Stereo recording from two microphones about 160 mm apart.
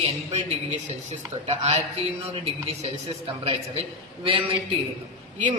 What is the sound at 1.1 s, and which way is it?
A man's voice, 40° right (ahead or behind).